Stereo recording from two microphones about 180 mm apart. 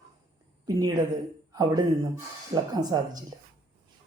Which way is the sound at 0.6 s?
20° right (ahead or behind).